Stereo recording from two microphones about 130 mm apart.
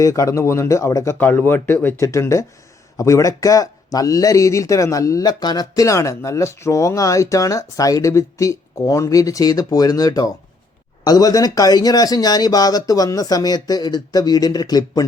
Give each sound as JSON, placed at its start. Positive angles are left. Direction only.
{"t": 0.0, "sound": "speech", "side_deg": 25}